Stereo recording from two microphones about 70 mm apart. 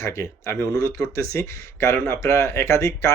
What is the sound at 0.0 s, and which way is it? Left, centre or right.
Speech, left.